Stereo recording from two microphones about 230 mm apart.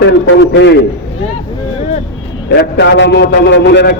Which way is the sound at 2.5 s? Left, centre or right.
Left.